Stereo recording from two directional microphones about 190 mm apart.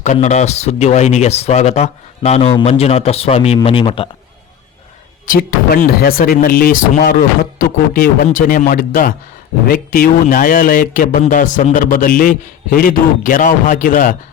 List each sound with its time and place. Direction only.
0.0 s speech: 35° left (ahead or behind)
5.2 s speech: 50° left (ahead or behind)